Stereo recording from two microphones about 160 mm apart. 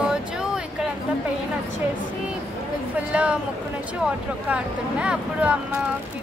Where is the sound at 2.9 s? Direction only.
10° right (ahead or behind).